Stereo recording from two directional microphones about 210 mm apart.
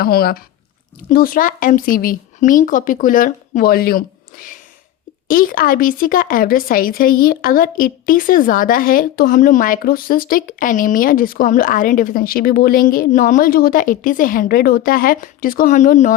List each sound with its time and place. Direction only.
0.0 s a woman's voice: 45° left (ahead or behind)